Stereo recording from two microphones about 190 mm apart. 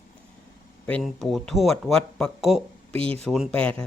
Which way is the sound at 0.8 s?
5° left (ahead or behind).